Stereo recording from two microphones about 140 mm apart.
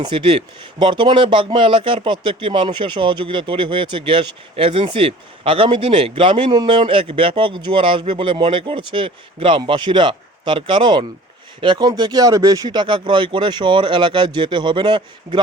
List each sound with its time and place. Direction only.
0.0 s speech: 35° right (ahead or behind)